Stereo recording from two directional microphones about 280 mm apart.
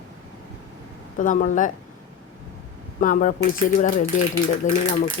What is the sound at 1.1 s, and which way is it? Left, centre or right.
Speech, left.